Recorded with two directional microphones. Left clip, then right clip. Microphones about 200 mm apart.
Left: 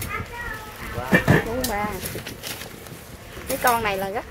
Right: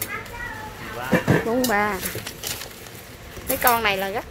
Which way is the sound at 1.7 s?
30° right (ahead or behind).